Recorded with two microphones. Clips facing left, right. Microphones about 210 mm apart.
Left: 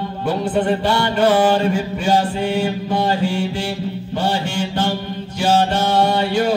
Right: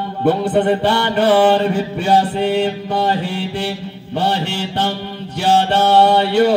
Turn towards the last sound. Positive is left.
turn(degrees=-65)  # may be behind; listen again after turning